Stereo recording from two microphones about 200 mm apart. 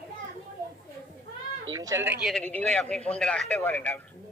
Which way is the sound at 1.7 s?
15° right (ahead or behind).